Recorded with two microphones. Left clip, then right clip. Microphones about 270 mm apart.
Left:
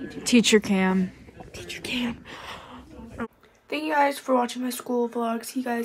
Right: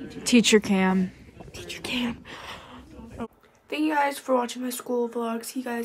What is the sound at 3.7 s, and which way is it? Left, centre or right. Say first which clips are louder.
Speech: left 2 dB; centre.